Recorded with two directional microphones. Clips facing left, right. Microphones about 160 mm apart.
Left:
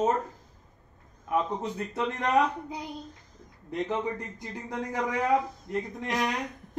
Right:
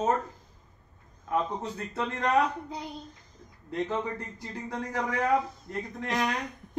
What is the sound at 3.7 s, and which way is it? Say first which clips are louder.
A child's voice: left 1 dB; 15° left (ahead or behind).